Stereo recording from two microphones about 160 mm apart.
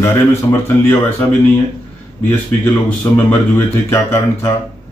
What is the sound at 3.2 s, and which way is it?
Speech, 15° left (ahead or behind).